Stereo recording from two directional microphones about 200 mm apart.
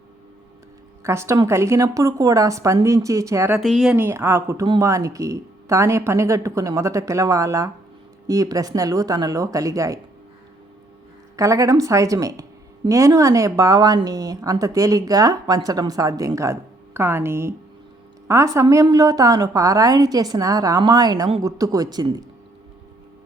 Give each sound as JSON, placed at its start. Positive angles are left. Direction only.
{"t": 1.0, "sound": "a woman's voice", "side_deg": -15}
{"t": 3.6, "sound": "speech", "side_deg": 0}
{"t": 3.9, "sound": "a woman's voice", "side_deg": -10}
{"t": 11.3, "sound": "a woman's voice", "side_deg": -15}